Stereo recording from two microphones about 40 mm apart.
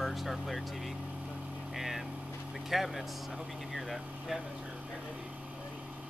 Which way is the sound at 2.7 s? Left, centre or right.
Centre.